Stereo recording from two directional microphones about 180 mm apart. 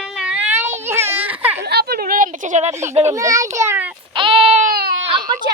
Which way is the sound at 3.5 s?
15° right (ahead or behind).